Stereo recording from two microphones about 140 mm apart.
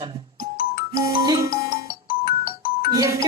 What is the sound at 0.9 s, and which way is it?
Speech, 25° right (ahead or behind).